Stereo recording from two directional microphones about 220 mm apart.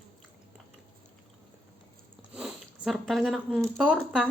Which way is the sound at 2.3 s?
5° right (ahead or behind).